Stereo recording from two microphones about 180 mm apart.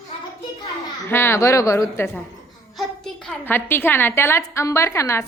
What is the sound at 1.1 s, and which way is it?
A woman's voice, 15° left (ahead or behind).